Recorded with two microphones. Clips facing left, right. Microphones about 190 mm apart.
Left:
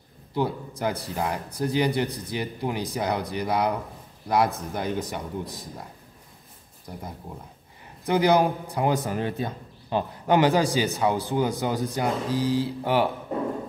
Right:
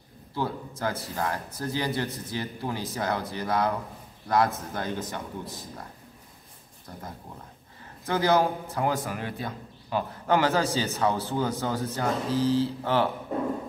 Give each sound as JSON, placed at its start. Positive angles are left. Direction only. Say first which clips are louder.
{"t": 0.3, "sound": "a man's voice", "louder": "left 4 dB", "side_deg": 15}
{"t": 6.9, "sound": "a man's voice", "louder": "left 3 dB", "side_deg": 15}